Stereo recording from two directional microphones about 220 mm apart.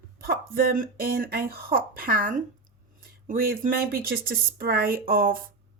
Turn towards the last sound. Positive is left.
turn(degrees=-40)  # may be behind; listen again after turning